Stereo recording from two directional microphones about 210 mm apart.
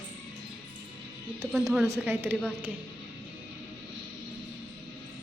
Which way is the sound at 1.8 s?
10° right (ahead or behind).